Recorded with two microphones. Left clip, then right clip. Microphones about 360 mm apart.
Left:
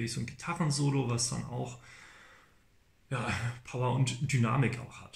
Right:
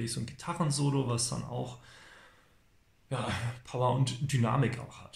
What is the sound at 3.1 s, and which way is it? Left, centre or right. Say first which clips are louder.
Speech: even; centre.